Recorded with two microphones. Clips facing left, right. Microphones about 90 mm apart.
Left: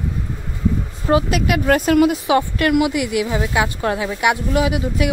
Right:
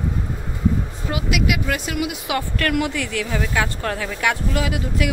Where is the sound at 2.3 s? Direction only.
20° left (ahead or behind).